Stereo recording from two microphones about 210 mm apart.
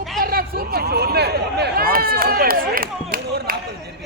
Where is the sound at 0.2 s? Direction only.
45° right (ahead or behind).